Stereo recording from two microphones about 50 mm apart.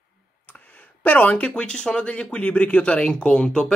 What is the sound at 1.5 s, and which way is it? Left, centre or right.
Speech, centre.